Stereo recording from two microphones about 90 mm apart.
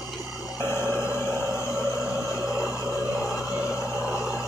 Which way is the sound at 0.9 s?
15° right (ahead or behind).